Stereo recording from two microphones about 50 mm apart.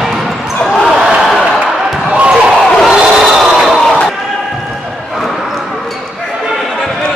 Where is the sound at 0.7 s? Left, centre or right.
Centre.